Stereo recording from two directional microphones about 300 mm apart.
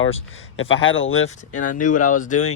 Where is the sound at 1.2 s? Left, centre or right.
Left.